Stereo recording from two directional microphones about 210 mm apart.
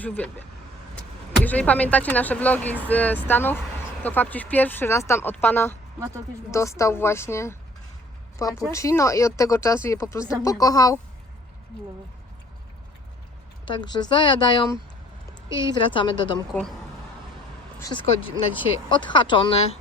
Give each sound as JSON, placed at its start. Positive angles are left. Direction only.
{"t": 0.0, "sound": "speech", "side_deg": 10}
{"t": 1.5, "sound": "speech", "side_deg": 5}
{"t": 13.7, "sound": "speech", "side_deg": 20}
{"t": 17.7, "sound": "speech", "side_deg": 20}